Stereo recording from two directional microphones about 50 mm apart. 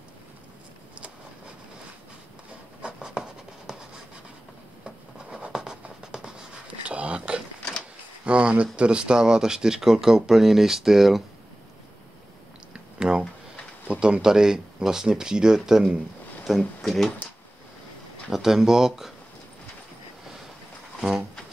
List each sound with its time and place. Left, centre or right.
2.8 s writing: centre
6.9 s a sound: right
8.7 s speech: right
12.7 s a sound: centre
13.8 s speech: right; by 16.6 s centre
16.8 s speech: centre
18.3 s speech: centre